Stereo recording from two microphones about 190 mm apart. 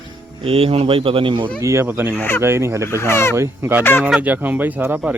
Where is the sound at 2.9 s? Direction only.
15° left (ahead or behind).